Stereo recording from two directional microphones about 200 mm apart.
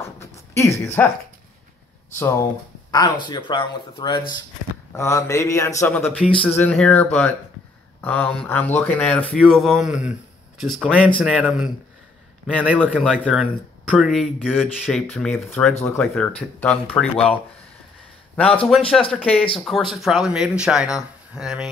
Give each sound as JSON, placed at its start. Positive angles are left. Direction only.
{"t": 0.0, "sound": "a sound", "side_deg": 15}
{"t": 2.1, "sound": "speech", "side_deg": 15}
{"t": 12.9, "sound": "speech", "side_deg": 0}
{"t": 18.3, "sound": "a man's voice", "side_deg": 5}